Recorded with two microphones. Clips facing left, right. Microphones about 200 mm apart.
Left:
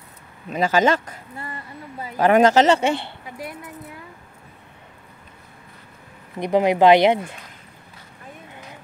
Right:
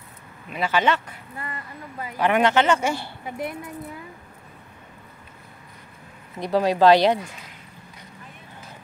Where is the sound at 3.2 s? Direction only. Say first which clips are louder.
Right 9 dB; 25° right (ahead or behind).